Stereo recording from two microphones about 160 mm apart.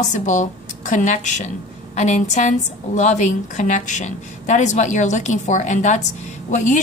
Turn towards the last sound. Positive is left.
turn(degrees=50)  # may be behind; listen again after turning